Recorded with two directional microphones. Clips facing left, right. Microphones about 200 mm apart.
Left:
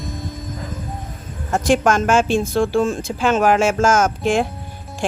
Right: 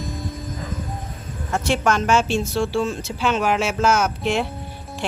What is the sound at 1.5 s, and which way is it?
Speech, 45° left (ahead or behind).